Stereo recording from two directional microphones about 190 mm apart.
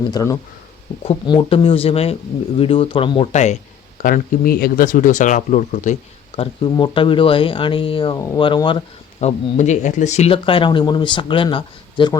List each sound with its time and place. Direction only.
0.1 s speech: 15° left (ahead or behind)
1.0 s speech: 30° left (ahead or behind)
4.0 s speech: 50° left (ahead or behind); by 8.8 s 25° left (ahead or behind)
9.2 s speech: 40° left (ahead or behind)